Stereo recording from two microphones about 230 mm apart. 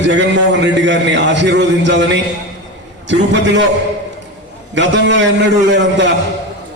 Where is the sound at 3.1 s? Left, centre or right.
Right.